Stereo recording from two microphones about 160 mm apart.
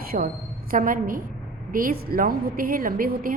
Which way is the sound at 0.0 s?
65° right (ahead or behind).